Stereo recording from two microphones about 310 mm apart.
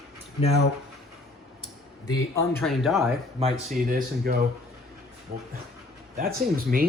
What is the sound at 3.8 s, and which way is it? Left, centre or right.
Speech, right.